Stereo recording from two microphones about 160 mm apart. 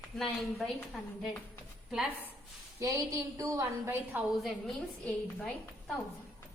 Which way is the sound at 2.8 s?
20° right (ahead or behind).